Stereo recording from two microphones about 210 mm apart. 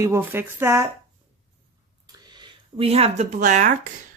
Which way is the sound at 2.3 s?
25° right (ahead or behind).